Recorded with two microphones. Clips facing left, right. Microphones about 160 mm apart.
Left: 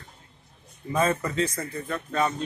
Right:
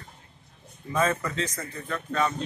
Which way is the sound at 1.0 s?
10° left (ahead or behind).